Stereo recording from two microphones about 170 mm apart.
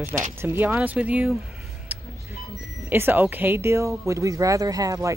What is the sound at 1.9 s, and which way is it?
Music, 10° right (ahead or behind).